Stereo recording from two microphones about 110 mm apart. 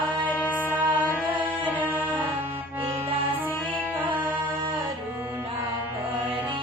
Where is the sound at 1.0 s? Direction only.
15° right (ahead or behind).